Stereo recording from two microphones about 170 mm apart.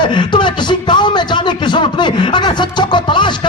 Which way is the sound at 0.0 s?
30° left (ahead or behind).